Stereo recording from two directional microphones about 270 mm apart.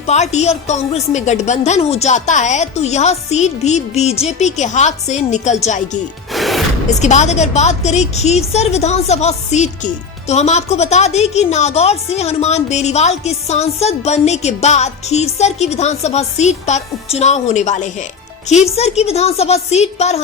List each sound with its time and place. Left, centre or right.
0.1 s a woman's voice: left
6.3 s music: centre
7.0 s a woman's voice: left